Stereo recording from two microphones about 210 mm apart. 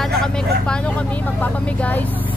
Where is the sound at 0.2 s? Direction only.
5° left (ahead or behind).